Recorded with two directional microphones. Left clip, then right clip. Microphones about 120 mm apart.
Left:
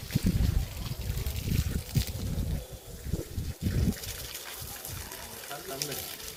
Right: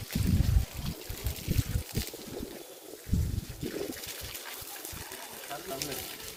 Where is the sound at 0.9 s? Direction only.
Centre (ahead or behind).